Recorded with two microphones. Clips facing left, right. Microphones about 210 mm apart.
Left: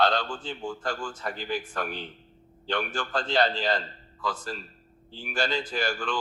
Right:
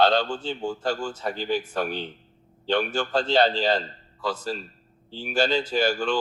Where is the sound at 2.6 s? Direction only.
25° right (ahead or behind).